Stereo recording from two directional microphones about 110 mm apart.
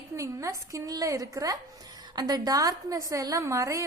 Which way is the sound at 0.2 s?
30° right (ahead or behind).